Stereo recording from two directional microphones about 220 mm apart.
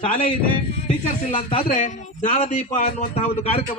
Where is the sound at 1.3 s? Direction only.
35° left (ahead or behind).